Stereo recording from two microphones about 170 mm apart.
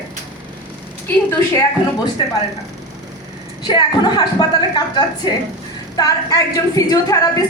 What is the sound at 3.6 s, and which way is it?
A woman's voice, 25° left (ahead or behind).